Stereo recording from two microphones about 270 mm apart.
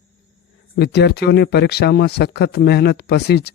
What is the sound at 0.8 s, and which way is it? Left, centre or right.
Speech, left.